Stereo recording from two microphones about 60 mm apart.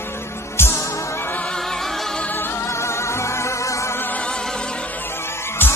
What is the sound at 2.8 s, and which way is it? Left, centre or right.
Music, left.